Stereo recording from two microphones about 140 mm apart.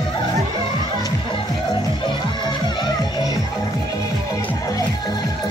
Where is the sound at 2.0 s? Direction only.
30° left (ahead or behind).